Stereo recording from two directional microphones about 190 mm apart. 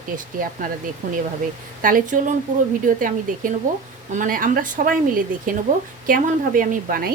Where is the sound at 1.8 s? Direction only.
45° right (ahead or behind).